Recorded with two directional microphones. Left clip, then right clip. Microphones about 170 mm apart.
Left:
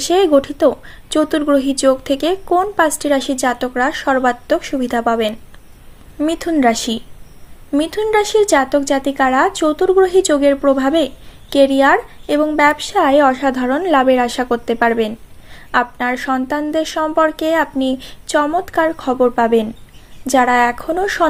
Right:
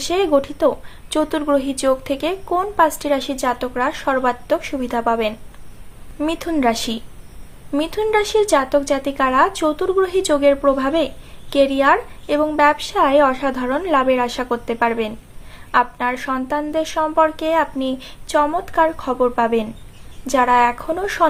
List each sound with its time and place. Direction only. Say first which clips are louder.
0.0 s speech: left 4 dB; 30° left (ahead or behind)